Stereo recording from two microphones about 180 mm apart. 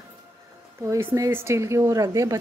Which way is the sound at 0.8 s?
15° right (ahead or behind).